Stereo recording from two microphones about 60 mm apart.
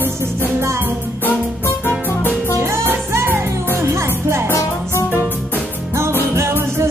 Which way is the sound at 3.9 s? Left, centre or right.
Right.